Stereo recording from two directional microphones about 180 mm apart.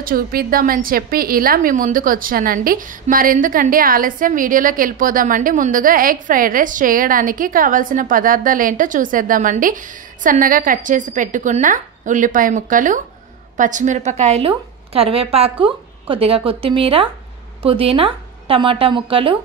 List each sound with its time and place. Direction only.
0.0 s a woman's voice: 55° right (ahead or behind); by 19.3 s 30° right (ahead or behind)